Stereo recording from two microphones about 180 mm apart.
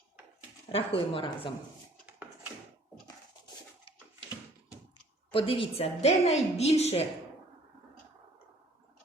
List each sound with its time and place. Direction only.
0.7 s speech: 30° left (ahead or behind)
5.3 s a woman's voice: 30° left (ahead or behind)